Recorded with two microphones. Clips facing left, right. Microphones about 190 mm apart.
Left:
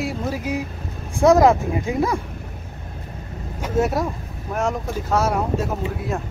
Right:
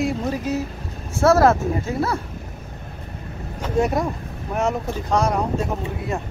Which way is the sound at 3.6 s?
Centre (ahead or behind).